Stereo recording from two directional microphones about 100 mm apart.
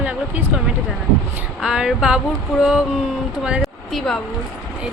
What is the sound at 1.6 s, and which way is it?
Speech, 5° right (ahead or behind).